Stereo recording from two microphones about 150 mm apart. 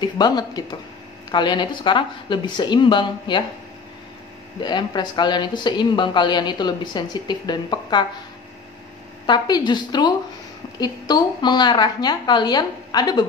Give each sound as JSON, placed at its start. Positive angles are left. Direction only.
{"t": 0.0, "sound": "speech", "side_deg": 25}
{"t": 4.6, "sound": "speech", "side_deg": 30}
{"t": 9.2, "sound": "speech", "side_deg": 30}